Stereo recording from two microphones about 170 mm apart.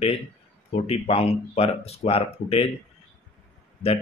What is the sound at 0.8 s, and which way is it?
Speech, 35° left (ahead or behind).